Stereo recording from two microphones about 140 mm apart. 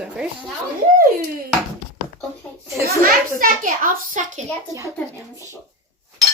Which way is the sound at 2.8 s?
85° right.